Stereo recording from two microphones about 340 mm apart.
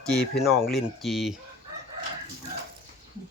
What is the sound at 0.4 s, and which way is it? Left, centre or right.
Speech, centre.